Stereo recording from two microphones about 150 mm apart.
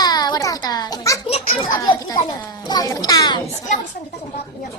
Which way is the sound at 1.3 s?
40° left (ahead or behind).